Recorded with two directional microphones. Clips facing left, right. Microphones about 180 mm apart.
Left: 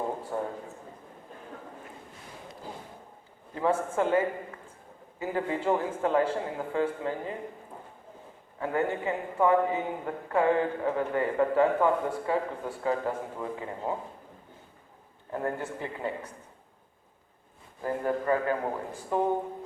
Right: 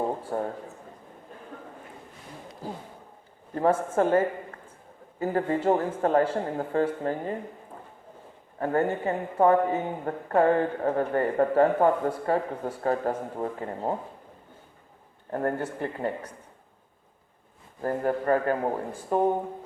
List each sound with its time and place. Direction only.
0.3 s a man's voice: 45° right (ahead or behind)
3.5 s a man's voice: 45° right (ahead or behind)
8.5 s a man's voice: 45° right (ahead or behind)
15.3 s a man's voice: 50° right (ahead or behind)
17.8 s a man's voice: 45° right (ahead or behind)